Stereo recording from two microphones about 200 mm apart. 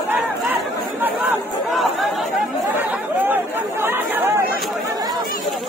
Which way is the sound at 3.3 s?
10° right (ahead or behind).